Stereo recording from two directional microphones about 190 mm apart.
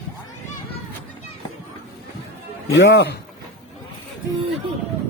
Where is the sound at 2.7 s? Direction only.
70° left (ahead or behind).